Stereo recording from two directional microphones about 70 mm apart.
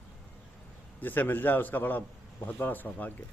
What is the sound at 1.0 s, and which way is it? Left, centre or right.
Speech, left.